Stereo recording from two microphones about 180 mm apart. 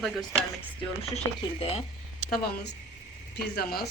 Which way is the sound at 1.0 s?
35° left (ahead or behind).